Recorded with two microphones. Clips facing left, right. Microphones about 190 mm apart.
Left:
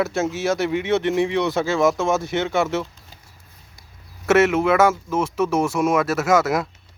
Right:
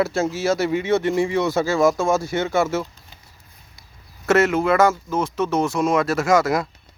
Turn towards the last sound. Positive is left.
turn(degrees=5)  # may be behind; listen again after turning